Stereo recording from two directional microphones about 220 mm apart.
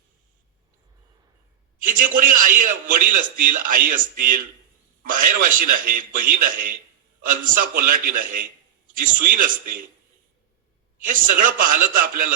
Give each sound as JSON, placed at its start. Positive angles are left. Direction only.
{"t": 1.8, "sound": "a man's voice", "side_deg": -40}
{"t": 11.0, "sound": "a man's voice", "side_deg": -40}